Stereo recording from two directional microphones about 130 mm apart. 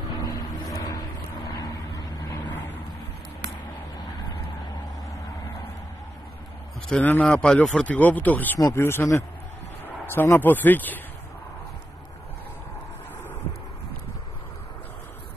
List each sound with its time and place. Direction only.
0.2 s vehicle: 30° left (ahead or behind)
6.9 s speech: 10° left (ahead or behind)
8.5 s speech: 25° left (ahead or behind)